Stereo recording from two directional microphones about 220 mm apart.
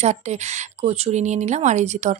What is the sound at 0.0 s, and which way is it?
Speech, 30° right (ahead or behind).